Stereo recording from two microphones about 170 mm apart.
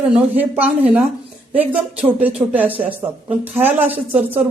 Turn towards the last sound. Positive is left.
turn(degrees=-10)  # may be behind; listen again after turning